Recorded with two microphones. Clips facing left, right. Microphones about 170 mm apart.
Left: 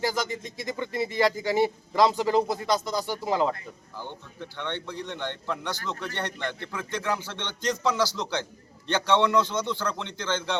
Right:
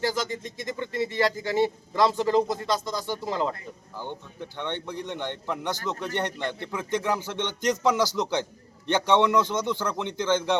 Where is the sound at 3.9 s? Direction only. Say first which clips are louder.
Right 3 dB; 15° right (ahead or behind).